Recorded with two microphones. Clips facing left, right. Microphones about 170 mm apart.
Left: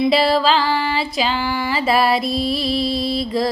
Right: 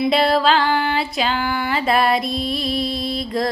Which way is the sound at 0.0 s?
Centre (ahead or behind).